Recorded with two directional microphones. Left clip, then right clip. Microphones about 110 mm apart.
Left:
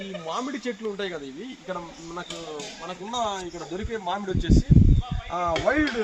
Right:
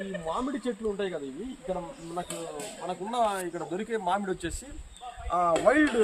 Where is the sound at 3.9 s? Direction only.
25° left (ahead or behind).